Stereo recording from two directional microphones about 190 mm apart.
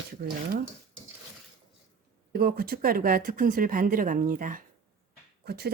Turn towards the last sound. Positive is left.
turn(degrees=-55)  # may be behind; listen again after turning